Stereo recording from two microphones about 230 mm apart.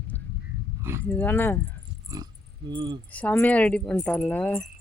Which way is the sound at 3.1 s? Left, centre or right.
Centre.